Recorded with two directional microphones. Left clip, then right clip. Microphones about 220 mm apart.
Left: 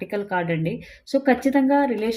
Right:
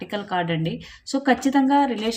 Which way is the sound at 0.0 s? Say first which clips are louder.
Left 1 dB; 20° right (ahead or behind).